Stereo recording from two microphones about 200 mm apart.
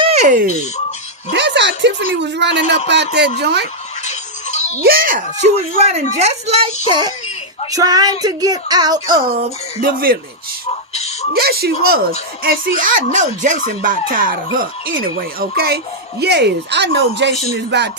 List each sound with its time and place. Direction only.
0.0 s speech: 35° right (ahead or behind)
1.3 s a woman's voice: 60° right (ahead or behind)
4.0 s music: 35° left (ahead or behind)
4.8 s speech: 45° right (ahead or behind); by 6.7 s 30° right (ahead or behind)
7.7 s speech: 20° right (ahead or behind)
9.8 s speech: 45° right (ahead or behind)
10.9 s a sound: 35° left (ahead or behind)
11.3 s a woman's voice: 50° right (ahead or behind)